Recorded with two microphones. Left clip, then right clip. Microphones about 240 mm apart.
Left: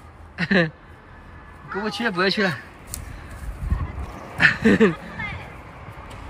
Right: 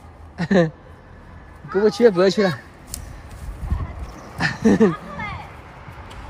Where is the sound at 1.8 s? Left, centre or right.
Right.